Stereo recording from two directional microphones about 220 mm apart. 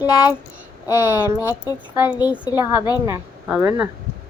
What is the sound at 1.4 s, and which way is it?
A woman's voice, 15° left (ahead or behind).